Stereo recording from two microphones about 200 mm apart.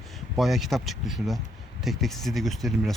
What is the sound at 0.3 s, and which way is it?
Speech, centre (ahead or behind).